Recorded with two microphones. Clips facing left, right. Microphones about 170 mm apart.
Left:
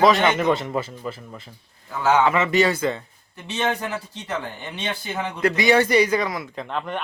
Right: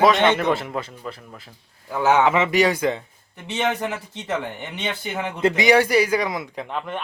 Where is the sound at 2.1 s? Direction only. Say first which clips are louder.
Right 1 dB; 20° right (ahead or behind).